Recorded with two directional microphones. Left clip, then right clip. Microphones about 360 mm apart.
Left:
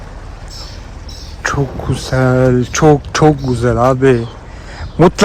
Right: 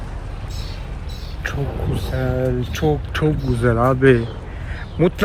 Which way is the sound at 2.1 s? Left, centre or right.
Left.